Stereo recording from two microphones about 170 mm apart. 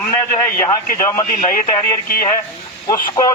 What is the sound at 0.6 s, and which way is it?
Speech, 20° left (ahead or behind).